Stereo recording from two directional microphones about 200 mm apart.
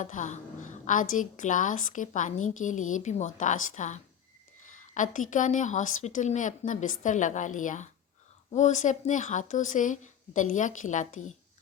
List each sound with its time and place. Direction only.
0.0 s a woman's voice: 40° left (ahead or behind)